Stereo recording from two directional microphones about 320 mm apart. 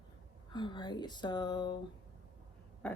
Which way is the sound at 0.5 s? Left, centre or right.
Centre.